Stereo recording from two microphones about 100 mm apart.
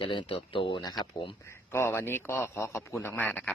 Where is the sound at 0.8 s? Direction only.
40° left (ahead or behind).